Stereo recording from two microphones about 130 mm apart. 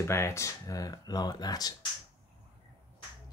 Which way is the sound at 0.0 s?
20° left (ahead or behind).